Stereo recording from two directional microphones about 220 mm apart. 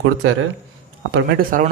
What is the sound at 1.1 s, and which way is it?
Speech, 45° right (ahead or behind).